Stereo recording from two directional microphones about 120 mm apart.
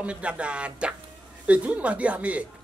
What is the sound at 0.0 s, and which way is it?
Speech, 10° right (ahead or behind).